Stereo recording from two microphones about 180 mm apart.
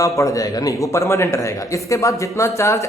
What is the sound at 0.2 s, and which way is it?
A man's voice, 20° left (ahead or behind).